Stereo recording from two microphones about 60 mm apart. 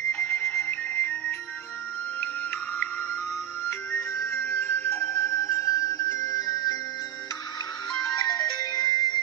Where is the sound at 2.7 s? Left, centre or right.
Left.